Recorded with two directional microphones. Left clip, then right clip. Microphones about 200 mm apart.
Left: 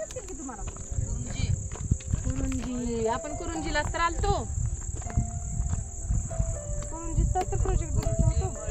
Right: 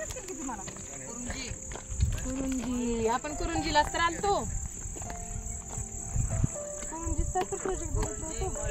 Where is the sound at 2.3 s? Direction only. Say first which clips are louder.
Right 1 dB; 15° right (ahead or behind).